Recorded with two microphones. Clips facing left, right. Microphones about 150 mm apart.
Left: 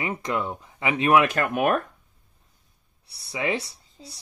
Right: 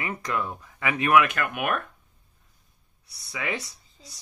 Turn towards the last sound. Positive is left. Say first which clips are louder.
# left 6 dB
turn(degrees=30)  # may be behind; listen again after turning